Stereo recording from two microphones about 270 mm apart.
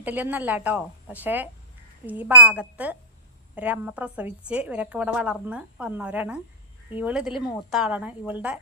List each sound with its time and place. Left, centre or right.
0.0 s a woman's voice: centre